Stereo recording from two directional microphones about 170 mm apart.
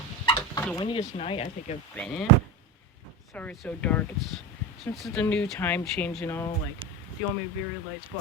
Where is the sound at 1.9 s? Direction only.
5° left (ahead or behind).